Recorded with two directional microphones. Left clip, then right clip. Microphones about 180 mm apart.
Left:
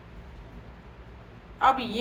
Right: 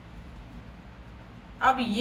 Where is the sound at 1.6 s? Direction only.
45° left (ahead or behind).